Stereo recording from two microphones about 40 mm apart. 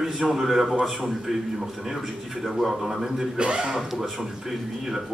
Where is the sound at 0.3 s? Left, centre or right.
Centre.